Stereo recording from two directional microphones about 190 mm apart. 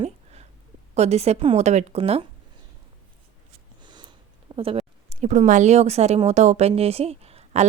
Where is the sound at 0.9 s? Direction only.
35° right (ahead or behind).